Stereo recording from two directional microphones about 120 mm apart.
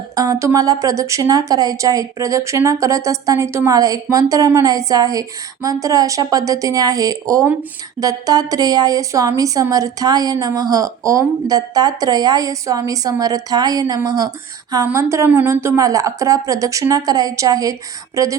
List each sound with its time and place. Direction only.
0.2 s a woman's voice: 25° right (ahead or behind)